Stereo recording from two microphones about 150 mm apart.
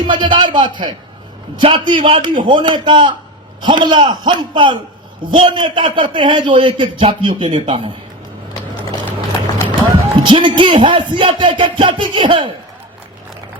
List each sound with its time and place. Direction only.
0.1 s a man's voice: 30° right (ahead or behind)
9.6 s a man's voice: 30° right (ahead or behind)